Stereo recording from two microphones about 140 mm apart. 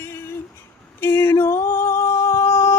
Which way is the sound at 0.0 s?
20° left (ahead or behind).